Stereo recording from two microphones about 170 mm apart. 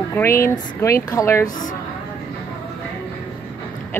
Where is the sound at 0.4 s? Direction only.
15° left (ahead or behind).